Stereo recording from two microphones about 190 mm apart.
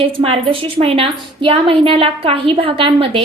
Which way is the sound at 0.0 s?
30° right (ahead or behind).